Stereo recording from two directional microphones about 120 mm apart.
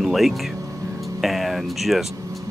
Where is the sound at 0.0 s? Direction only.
Centre (ahead or behind).